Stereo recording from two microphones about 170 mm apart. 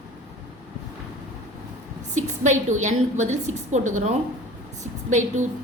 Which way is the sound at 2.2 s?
45° right (ahead or behind).